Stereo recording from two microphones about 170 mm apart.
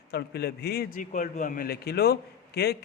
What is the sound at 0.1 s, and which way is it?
A man's voice, 70° left (ahead or behind).